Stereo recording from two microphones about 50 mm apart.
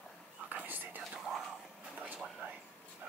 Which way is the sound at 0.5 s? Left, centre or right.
Right.